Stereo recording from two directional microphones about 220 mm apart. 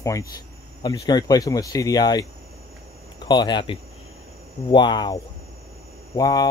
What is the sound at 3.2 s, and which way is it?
Speech, 20° left (ahead or behind).